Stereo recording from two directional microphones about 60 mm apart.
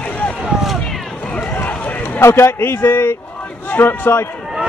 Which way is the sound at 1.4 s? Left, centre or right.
Left.